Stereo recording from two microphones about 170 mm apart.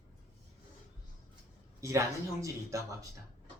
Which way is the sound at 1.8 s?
20° right (ahead or behind).